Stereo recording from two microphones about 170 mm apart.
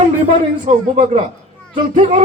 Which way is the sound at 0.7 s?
35° right (ahead or behind).